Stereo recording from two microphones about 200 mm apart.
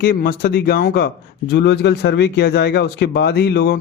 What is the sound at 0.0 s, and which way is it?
Speech, 45° left (ahead or behind).